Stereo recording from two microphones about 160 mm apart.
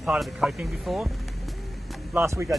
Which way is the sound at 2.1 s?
15° right (ahead or behind).